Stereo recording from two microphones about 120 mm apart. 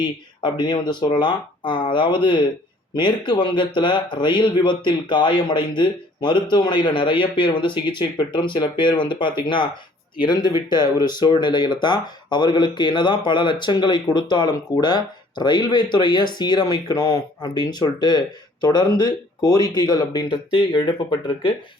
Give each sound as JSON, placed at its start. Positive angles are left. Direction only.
{"t": 0.4, "sound": "speech", "side_deg": 40}